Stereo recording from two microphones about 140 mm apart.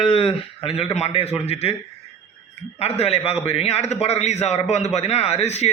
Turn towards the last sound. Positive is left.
turn(degrees=50)  # may be behind; listen again after turning